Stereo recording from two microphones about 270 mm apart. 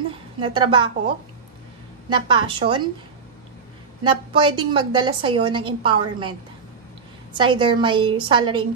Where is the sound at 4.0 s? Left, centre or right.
Centre.